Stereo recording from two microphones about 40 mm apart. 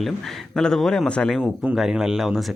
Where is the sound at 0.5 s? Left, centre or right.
Centre.